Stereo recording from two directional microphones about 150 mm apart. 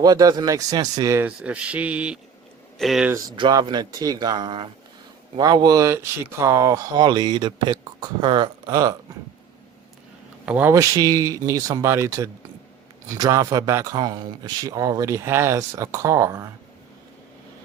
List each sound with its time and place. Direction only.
0.0 s speech: 25° right (ahead or behind)
1.4 s mantra: 10° right (ahead or behind)
2.7 s speech: centre (ahead or behind)
3.1 s speech: 25° right (ahead or behind)
10.4 s speech: 10° right (ahead or behind)